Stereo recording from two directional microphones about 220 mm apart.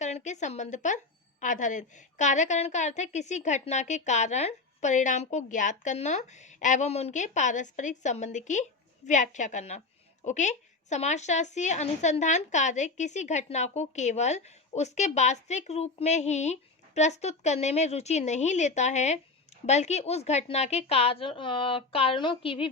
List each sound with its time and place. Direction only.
0.0 s a woman's voice: 35° left (ahead or behind)